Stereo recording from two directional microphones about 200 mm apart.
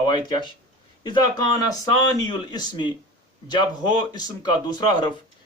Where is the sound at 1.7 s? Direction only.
20° left (ahead or behind).